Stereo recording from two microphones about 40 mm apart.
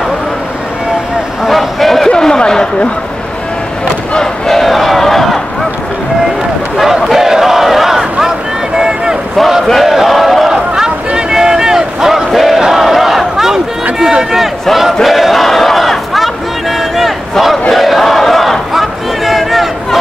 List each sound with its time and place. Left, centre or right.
1.4 s a sound: centre
2.0 s a sound: centre
4.2 s battle cry: centre
6.8 s battle cry: centre
8.7 s boat: centre
9.8 s a sound: centre
11.1 s vehicle: centre
12.3 s battle cry: centre
14.3 s speech: centre
15.0 s crowd: centre
17.6 s battle cry: centre